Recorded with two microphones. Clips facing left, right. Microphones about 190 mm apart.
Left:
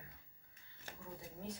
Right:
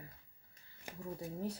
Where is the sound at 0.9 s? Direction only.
15° right (ahead or behind).